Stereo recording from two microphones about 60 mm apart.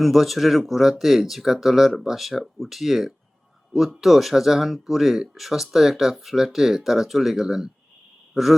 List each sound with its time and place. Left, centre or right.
0.0 s speech: centre